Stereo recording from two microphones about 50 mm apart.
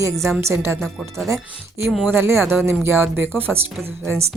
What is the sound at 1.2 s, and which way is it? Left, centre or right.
Speech, right.